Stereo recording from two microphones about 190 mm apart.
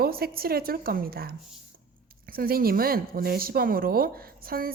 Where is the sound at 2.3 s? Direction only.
50° right (ahead or behind).